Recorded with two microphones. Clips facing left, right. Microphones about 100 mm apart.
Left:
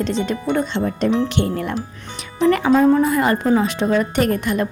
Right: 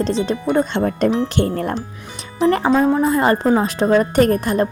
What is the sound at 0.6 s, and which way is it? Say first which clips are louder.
Speech: right 2 dB; 50° right (ahead or behind).